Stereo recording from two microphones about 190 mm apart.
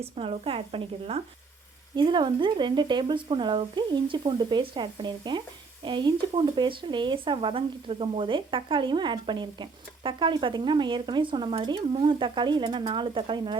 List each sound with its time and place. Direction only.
0.0 s speech: 30° right (ahead or behind)